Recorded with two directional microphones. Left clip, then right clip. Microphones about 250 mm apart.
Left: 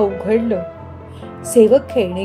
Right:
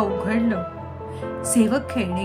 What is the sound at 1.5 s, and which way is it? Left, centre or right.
Speech, centre.